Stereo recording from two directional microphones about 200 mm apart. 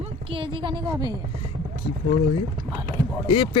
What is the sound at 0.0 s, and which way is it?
A woman's voice, 25° right (ahead or behind).